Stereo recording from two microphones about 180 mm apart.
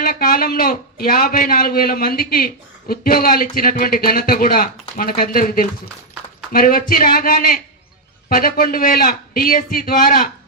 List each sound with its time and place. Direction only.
0.0 s a man's voice: 55° left (ahead or behind)